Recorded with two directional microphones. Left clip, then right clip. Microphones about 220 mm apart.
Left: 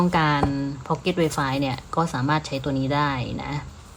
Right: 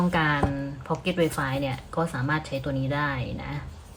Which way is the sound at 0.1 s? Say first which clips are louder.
Left 3 dB; 10° left (ahead or behind).